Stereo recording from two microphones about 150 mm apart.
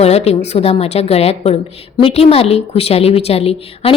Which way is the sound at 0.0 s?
45° left (ahead or behind).